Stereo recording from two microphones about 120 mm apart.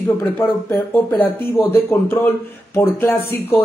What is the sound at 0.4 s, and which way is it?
Speech, 20° left (ahead or behind).